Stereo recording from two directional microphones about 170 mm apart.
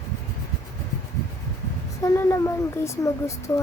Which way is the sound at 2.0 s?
15° left (ahead or behind).